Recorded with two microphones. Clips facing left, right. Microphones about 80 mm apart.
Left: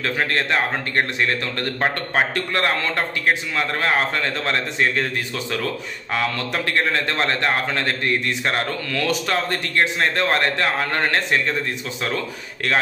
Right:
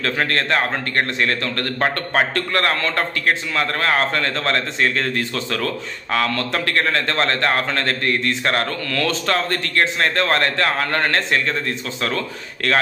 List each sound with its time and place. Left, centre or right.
0.0 s a man's voice: centre